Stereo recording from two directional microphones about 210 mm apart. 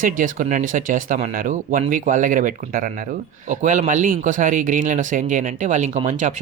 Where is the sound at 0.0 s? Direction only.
40° right (ahead or behind).